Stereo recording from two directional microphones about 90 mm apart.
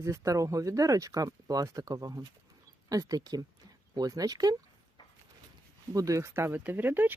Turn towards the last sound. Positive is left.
turn(degrees=-20)  # may be behind; listen again after turning